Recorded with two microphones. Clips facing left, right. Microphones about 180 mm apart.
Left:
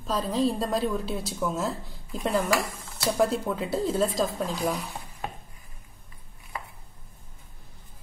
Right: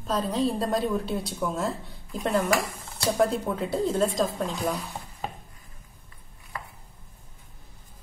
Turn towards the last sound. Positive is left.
turn(degrees=20)  # may be behind; listen again after turning